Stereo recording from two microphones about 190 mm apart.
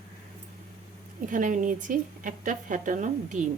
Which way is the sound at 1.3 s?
45° right (ahead or behind).